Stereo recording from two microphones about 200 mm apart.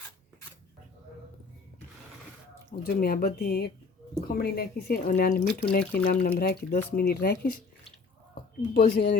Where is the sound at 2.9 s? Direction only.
50° left (ahead or behind).